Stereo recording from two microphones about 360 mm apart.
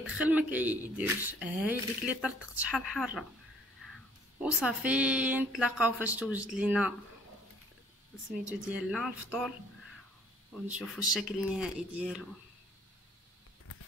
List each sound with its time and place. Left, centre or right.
0.0 s speech: centre
4.4 s speech: centre
8.6 s speech: centre
11.1 s speech: centre